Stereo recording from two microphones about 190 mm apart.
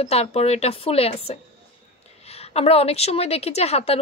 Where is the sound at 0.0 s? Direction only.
30° left (ahead or behind).